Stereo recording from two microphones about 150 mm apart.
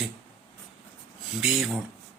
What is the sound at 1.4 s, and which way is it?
Speech, centre (ahead or behind).